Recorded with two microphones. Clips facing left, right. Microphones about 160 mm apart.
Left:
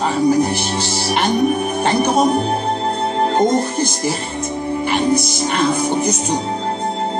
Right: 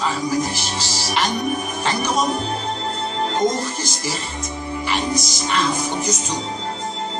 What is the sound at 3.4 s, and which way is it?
Speech, 60° left (ahead or behind).